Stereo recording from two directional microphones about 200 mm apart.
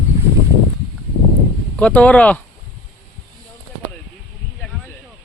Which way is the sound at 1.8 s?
5° left (ahead or behind).